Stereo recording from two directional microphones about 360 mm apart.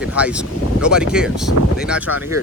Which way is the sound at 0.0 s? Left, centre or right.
Centre.